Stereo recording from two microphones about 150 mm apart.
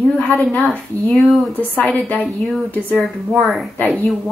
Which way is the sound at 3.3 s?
Centre (ahead or behind).